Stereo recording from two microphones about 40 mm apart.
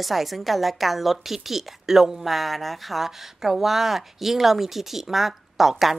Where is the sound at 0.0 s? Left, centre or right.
Centre.